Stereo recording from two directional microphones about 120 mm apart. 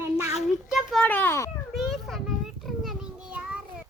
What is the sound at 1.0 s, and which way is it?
Children playing, 15° left (ahead or behind).